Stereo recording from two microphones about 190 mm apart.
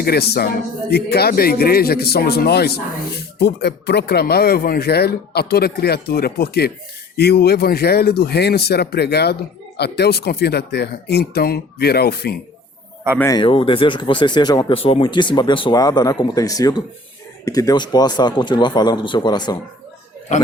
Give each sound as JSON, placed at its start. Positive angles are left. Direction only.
{"t": 0.0, "sound": "speech", "side_deg": 55}
{"t": 13.1, "sound": "speech", "side_deg": 15}
{"t": 13.4, "sound": "speech", "side_deg": 25}